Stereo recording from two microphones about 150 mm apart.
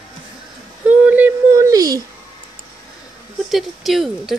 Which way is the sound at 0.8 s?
10° right (ahead or behind).